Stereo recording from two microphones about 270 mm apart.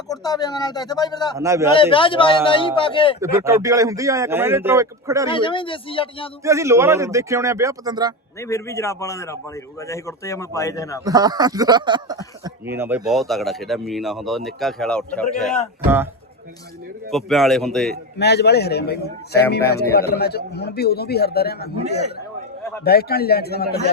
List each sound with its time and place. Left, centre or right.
0.1 s speech: centre
1.4 s speech: centre
1.7 s a man's voice: centre
3.2 s speech: centre
5.3 s a man's voice: centre
6.4 s speech: centre
8.4 s speech: centre
11.0 s speech: centre
17.1 s speech: centre
18.2 s a man's voice: left
22.8 s a man's voice: left